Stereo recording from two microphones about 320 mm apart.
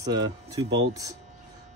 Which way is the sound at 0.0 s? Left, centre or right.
Centre.